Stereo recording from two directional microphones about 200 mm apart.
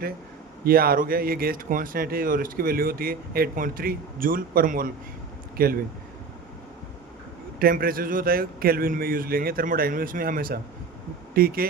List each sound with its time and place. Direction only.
0.6 s speech: 50° right (ahead or behind)
7.6 s speech: 45° right (ahead or behind)